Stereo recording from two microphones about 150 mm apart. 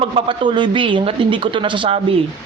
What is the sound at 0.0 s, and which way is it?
A woman's voice, 35° right (ahead or behind).